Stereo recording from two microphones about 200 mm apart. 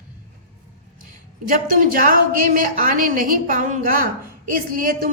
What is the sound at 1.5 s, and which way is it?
A woman's voice, 45° right (ahead or behind).